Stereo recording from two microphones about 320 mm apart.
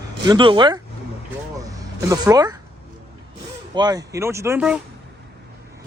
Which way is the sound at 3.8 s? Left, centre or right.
Centre.